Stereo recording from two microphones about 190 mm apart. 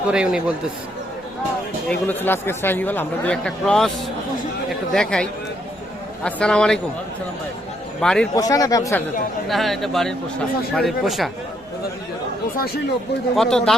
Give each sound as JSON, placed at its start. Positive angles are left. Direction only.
{"t": 0.1, "sound": "speech", "side_deg": -5}
{"t": 1.9, "sound": "speech", "side_deg": 10}
{"t": 8.0, "sound": "speech", "side_deg": 5}
{"t": 8.4, "sound": "speech", "side_deg": 20}
{"t": 9.5, "sound": "speech", "side_deg": 0}
{"t": 12.5, "sound": "speech", "side_deg": 55}
{"t": 13.3, "sound": "speech", "side_deg": 0}